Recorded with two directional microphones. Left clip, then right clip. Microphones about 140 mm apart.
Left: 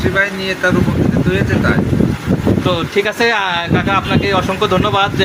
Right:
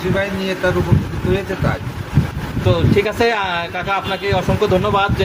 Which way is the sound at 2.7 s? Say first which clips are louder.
Right 3 dB; 15° left (ahead or behind).